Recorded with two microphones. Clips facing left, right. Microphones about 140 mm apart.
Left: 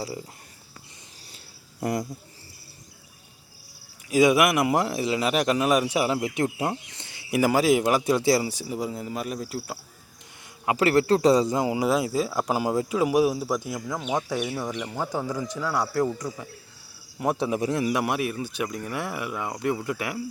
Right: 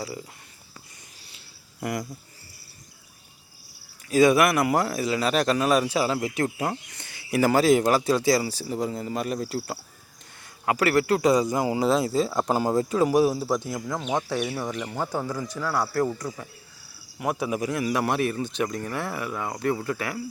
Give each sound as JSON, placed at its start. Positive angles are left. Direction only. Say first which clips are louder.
{"t": 1.8, "sound": "speech", "louder": "left 3 dB", "side_deg": 30}
{"t": 4.1, "sound": "speech", "louder": "right 1 dB", "side_deg": 15}
{"t": 10.7, "sound": "speech", "louder": "left 1 dB", "side_deg": 25}
{"t": 15.1, "sound": "speech", "louder": "even", "side_deg": 15}
{"t": 17.2, "sound": "speech", "louder": "left 2 dB", "side_deg": 30}
{"t": 17.8, "sound": "speech", "louder": "right 1 dB", "side_deg": 15}